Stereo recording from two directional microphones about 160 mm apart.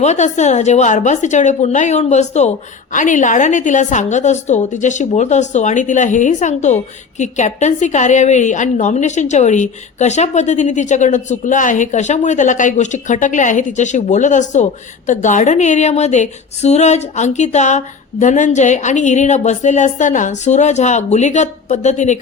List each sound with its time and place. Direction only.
0.0 s a woman's voice: 45° left (ahead or behind)